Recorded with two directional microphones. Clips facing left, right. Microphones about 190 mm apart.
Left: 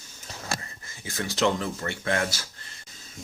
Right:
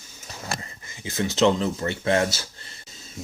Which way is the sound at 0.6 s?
20° right (ahead or behind).